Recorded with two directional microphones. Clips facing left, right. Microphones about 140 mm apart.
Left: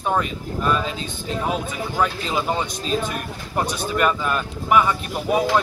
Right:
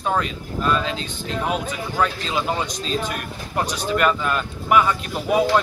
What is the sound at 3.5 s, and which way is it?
Speech, 10° left (ahead or behind).